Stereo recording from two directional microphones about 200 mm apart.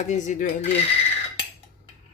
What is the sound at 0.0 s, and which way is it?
Speech, 40° left (ahead or behind).